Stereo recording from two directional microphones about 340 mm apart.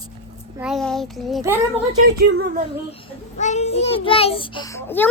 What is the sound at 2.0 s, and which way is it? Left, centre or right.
Speech, right.